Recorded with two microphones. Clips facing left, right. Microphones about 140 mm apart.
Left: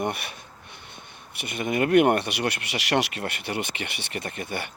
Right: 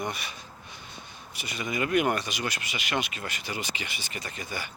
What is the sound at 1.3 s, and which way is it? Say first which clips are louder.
Speech: left 6 dB; 55° left (ahead or behind).